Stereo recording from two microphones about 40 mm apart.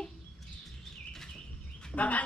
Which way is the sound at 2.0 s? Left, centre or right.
Left.